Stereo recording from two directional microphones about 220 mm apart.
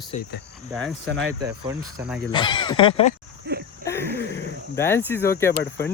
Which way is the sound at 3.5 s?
50° right (ahead or behind).